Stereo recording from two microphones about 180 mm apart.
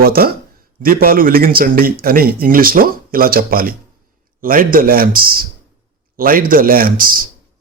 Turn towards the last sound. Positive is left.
turn(degrees=-50)  # may be behind; listen again after turning